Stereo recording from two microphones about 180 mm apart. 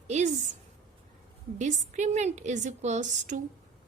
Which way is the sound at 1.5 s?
40° right (ahead or behind).